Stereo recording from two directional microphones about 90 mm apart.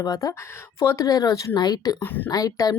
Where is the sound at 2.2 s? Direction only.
40° left (ahead or behind).